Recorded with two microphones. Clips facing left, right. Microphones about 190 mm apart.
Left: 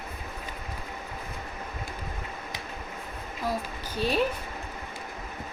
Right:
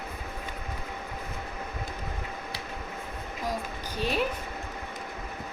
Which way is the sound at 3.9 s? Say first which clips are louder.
Left 3 dB; 15° right (ahead or behind).